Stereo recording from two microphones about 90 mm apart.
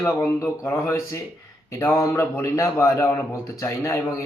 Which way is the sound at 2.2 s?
30° left (ahead or behind).